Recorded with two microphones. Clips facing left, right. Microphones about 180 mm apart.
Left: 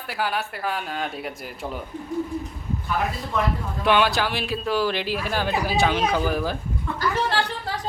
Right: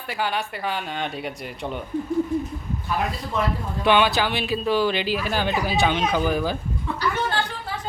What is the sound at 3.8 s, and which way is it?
Speech, centre (ahead or behind).